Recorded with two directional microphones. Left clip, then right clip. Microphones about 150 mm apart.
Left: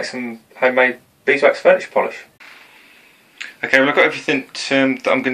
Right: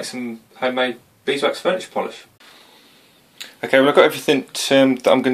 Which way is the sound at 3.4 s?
50° right (ahead or behind).